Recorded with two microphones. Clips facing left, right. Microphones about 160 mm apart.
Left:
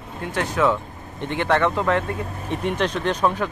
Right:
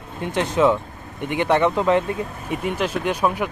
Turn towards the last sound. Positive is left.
turn(degrees=-10)  # may be behind; listen again after turning